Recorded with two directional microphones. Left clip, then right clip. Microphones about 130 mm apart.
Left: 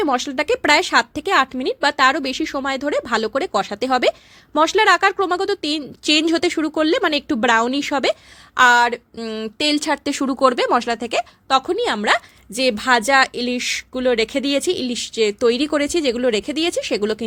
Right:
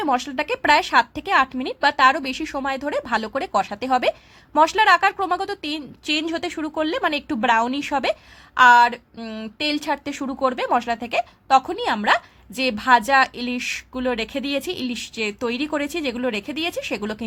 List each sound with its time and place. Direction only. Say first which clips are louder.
0.0 s a woman's voice: left 2 dB; 30° left (ahead or behind)